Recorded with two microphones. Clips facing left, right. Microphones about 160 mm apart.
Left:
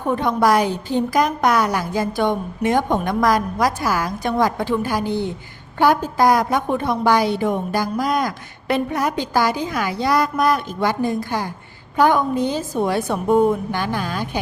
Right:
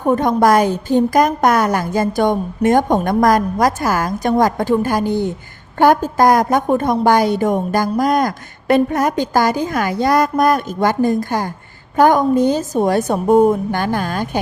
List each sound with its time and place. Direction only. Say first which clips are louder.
0.0 s a woman's voice: right 4 dB; 45° right (ahead or behind)